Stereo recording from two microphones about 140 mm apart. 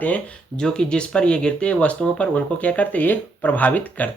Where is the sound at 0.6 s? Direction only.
5° left (ahead or behind).